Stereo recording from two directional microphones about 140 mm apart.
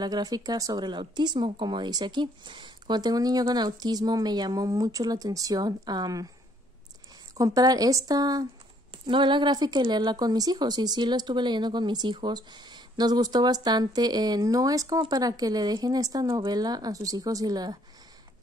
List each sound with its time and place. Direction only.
0.0 s speech: 30° right (ahead or behind)
7.3 s speech: 25° right (ahead or behind)